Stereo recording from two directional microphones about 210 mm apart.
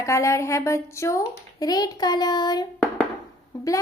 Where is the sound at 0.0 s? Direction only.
15° left (ahead or behind).